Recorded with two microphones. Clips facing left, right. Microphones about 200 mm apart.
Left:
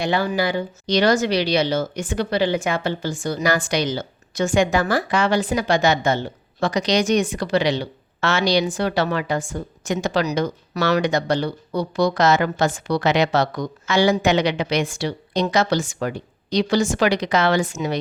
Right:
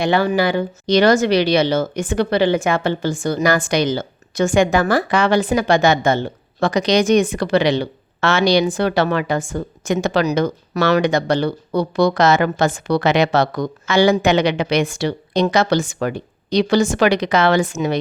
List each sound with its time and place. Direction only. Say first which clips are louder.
0.0 s speech: right 4 dB; 60° right (ahead or behind)